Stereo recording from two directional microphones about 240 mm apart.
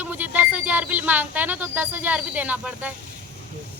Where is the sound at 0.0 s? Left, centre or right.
Centre.